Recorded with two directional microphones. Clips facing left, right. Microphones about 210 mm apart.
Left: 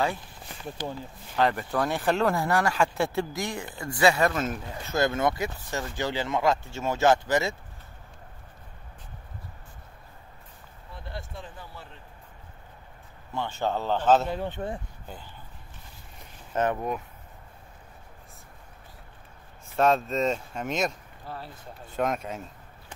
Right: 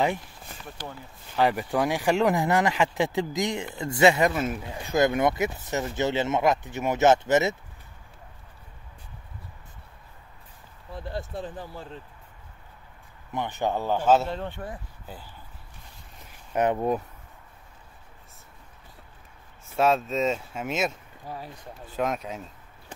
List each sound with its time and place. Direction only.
0.7 s speech: 20° left (ahead or behind)
1.3 s speech: 10° right (ahead or behind)
4.3 s speech: 10° right (ahead or behind)
10.9 s speech: 40° right (ahead or behind)
13.3 s speech: 15° right (ahead or behind)
14.3 s speech: 10° left (ahead or behind)
16.5 s speech: 15° right (ahead or behind)
19.8 s speech: 5° right (ahead or behind)